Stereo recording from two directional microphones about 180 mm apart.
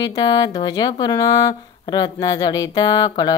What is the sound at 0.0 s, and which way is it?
A woman's voice, 20° left (ahead or behind).